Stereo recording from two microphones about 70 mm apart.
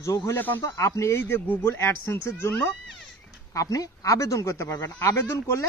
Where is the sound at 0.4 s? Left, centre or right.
Left.